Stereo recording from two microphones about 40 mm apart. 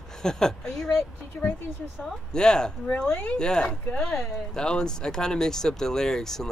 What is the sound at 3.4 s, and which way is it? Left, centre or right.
Speech, centre.